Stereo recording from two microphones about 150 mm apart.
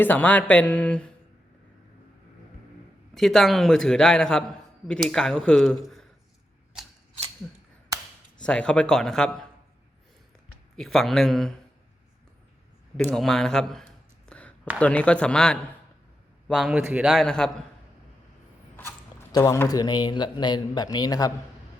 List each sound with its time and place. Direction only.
0.0 s speech: 10° left (ahead or behind)
3.2 s a man's voice: centre (ahead or behind)
8.4 s a man's voice: 5° left (ahead or behind)
10.8 s a man's voice: centre (ahead or behind)
13.1 s a sound: 5° left (ahead or behind)
14.8 s a man's voice: 10° left (ahead or behind)
18.8 s speech: 15° left (ahead or behind)